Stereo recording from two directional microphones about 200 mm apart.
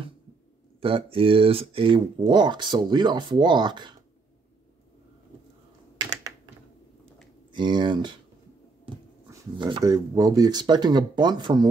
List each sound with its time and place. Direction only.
0.7 s speech: 25° right (ahead or behind)
7.5 s speech: 20° right (ahead or behind)